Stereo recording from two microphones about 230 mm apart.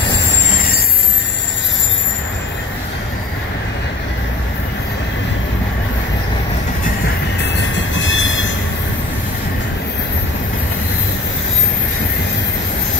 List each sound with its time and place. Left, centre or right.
7.7 s train: left